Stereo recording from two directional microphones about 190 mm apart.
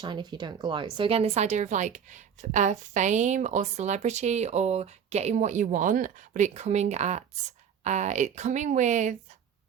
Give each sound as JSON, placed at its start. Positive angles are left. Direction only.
{"t": 0.0, "sound": "speech", "side_deg": -25}